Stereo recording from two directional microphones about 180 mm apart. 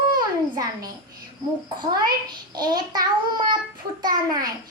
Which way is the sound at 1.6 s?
25° right (ahead or behind).